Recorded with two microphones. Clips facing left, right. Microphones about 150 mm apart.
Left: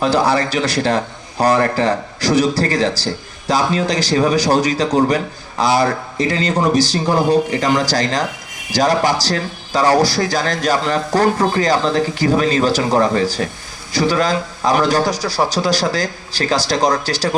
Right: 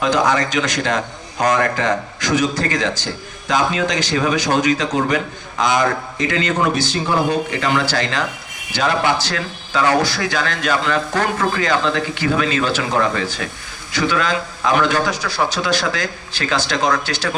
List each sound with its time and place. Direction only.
0.0 s a man's voice: 35° left (ahead or behind)